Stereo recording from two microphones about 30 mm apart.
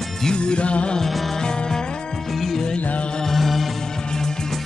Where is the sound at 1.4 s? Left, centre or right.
Left.